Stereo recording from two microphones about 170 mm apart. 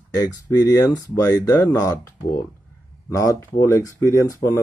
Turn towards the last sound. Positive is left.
turn(degrees=15)  # may be behind; listen again after turning